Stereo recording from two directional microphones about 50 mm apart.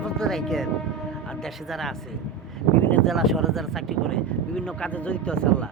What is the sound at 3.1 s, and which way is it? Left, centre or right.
Speech, centre.